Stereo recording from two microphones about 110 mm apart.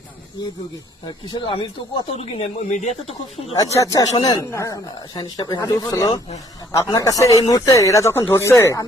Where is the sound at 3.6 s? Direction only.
30° left (ahead or behind).